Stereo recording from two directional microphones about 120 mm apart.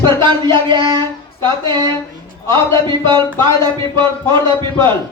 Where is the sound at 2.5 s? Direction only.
40° right (ahead or behind).